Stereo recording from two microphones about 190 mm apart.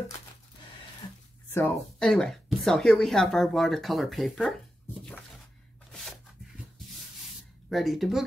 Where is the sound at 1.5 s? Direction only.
10° left (ahead or behind).